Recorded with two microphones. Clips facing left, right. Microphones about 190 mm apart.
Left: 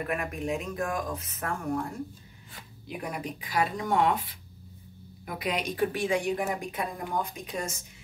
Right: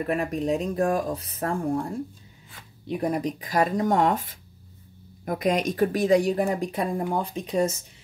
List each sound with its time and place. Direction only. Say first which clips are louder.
0.1 s speech: right 7 dB; 35° right (ahead or behind)